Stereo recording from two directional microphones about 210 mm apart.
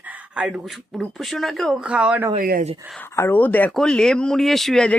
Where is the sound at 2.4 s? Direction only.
45° right (ahead or behind).